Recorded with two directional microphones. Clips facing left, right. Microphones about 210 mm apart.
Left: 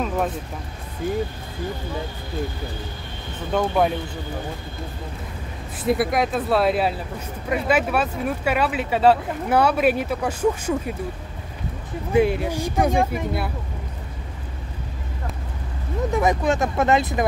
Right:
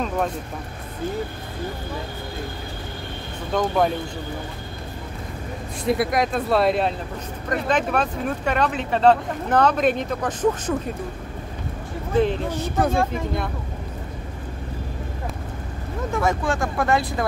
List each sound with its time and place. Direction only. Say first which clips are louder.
3.5 s speech: even; 5° left (ahead or behind)
5.9 s speech: left 1 dB; centre (ahead or behind)
12.1 s speech: left 2 dB; 10° left (ahead or behind)
16.1 s speech: left 2 dB; 20° left (ahead or behind)